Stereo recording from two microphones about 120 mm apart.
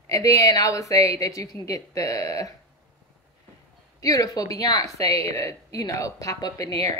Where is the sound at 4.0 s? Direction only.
30° left (ahead or behind).